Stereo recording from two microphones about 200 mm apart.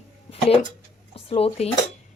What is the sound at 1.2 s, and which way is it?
Cutlery, 30° left (ahead or behind).